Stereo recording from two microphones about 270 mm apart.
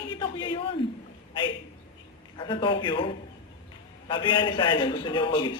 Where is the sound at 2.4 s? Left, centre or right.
Centre.